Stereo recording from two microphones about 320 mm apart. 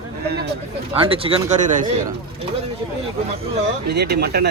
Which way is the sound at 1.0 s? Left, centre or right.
Centre.